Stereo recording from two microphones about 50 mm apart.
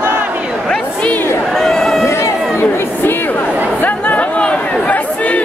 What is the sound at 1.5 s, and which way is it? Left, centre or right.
Run, centre.